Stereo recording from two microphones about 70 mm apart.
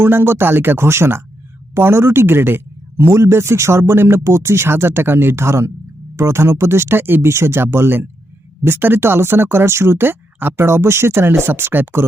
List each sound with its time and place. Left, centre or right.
0.0 s speech: right